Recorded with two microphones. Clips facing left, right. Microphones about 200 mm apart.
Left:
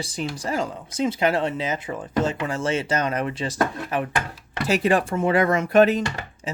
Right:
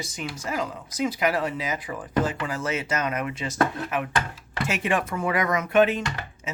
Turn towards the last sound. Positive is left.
turn(degrees=35)  # may be behind; listen again after turning